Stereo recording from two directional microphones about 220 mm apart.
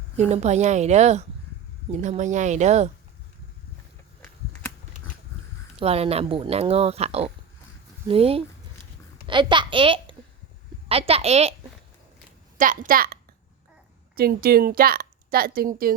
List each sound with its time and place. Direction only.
0.3 s speech: 30° right (ahead or behind)
5.8 s a child's voice: 25° right (ahead or behind)
12.5 s a woman's voice: 35° right (ahead or behind)
14.2 s a woman's voice: 45° right (ahead or behind)